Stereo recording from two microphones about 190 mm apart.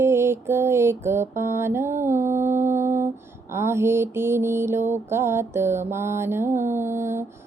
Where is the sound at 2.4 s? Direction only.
40° right (ahead or behind).